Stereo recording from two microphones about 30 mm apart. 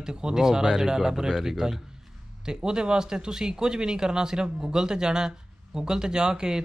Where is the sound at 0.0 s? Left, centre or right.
Right.